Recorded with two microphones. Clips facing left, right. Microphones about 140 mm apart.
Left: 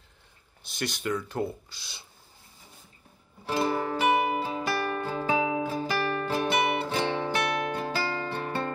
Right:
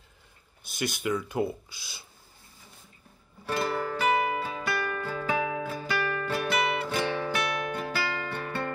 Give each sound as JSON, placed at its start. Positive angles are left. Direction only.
{"t": 0.7, "sound": "speech", "side_deg": -10}
{"t": 3.4, "sound": "music", "side_deg": 25}
{"t": 4.6, "sound": "music", "side_deg": 30}